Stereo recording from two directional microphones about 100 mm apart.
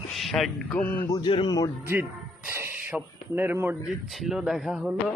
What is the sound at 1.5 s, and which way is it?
Speech, 35° left (ahead or behind).